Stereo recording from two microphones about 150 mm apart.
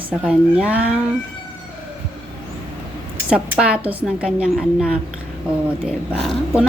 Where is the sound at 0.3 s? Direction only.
5° right (ahead or behind).